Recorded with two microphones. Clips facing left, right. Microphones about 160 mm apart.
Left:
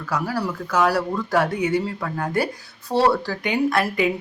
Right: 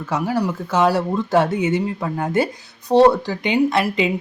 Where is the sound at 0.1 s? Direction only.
20° right (ahead or behind).